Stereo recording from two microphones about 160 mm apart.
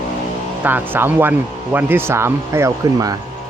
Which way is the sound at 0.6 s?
10° right (ahead or behind).